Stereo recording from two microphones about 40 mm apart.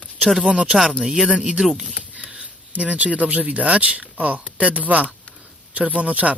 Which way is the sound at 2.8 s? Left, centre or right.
Right.